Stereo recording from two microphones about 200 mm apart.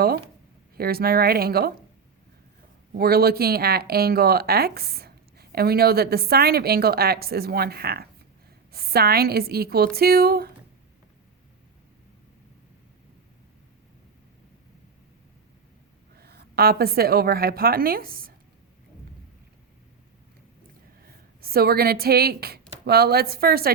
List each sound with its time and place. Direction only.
0.8 s speech: 50° right (ahead or behind)
2.9 s speech: 50° right (ahead or behind)
16.1 s a woman's voice: 50° right (ahead or behind)
21.0 s speech: 50° right (ahead or behind)